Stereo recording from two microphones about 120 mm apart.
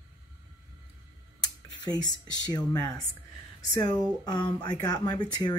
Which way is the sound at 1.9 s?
35° left (ahead or behind).